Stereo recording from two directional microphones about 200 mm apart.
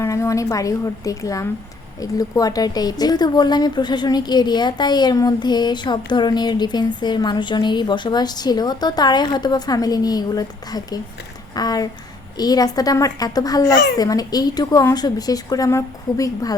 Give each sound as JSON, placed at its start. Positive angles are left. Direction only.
{"t": 0.0, "sound": "a woman's voice", "side_deg": 15}